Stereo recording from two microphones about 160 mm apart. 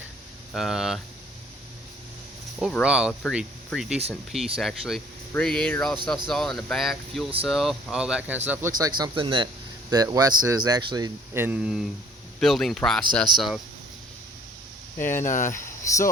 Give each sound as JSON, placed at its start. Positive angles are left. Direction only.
{"t": 0.5, "sound": "speech", "side_deg": 0}
{"t": 2.6, "sound": "speech", "side_deg": 0}
{"t": 8.4, "sound": "speech", "side_deg": -15}
{"t": 8.9, "sound": "speech", "side_deg": -30}
{"t": 11.4, "sound": "speech", "side_deg": -5}
{"t": 15.1, "sound": "speech", "side_deg": 50}
{"t": 15.6, "sound": "a sound", "side_deg": 20}